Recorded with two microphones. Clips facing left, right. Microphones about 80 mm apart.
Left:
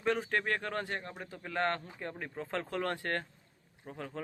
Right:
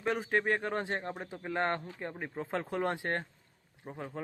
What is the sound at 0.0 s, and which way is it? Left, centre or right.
Speech, centre.